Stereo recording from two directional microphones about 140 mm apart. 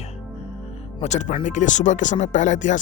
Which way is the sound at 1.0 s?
55° left (ahead or behind).